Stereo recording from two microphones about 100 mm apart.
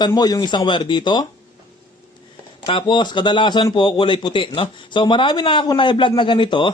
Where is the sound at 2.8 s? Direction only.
45° left (ahead or behind).